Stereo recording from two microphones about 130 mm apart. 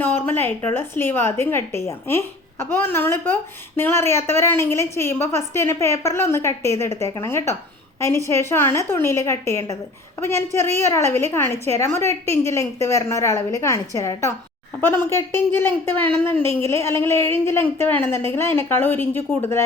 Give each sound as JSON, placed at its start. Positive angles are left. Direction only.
{"t": 0.0, "sound": "a woman's voice", "side_deg": 15}